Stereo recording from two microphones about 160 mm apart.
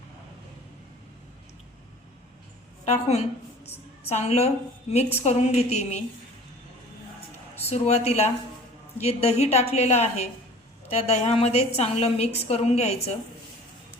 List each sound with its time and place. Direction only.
2.8 s a woman's voice: 40° left (ahead or behind)
7.7 s a woman's voice: 40° left (ahead or behind)